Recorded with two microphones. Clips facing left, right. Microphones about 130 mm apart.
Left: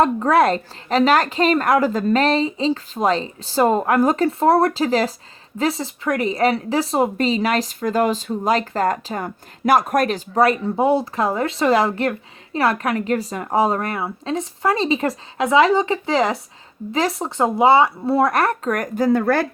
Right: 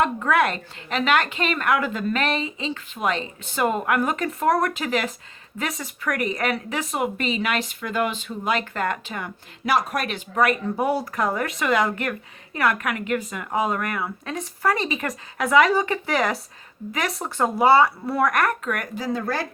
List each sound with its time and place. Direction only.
0.0 s speech: 35° left (ahead or behind); by 19.5 s 60° left (ahead or behind)